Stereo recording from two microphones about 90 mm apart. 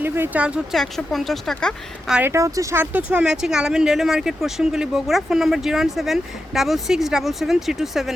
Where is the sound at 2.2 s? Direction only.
35° right (ahead or behind).